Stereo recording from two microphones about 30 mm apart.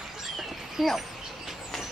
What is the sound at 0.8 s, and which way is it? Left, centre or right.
Speech, centre.